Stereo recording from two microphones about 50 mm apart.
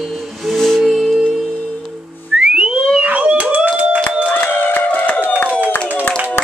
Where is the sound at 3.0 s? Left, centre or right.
Right.